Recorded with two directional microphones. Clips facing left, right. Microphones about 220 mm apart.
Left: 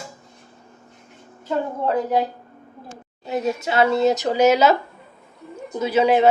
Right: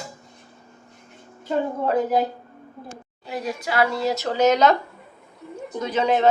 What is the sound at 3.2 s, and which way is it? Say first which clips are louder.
Speech: left 5 dB; 25° left (ahead or behind).